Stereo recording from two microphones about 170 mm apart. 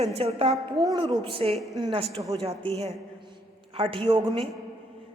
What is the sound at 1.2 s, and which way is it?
A woman's voice, 30° right (ahead or behind).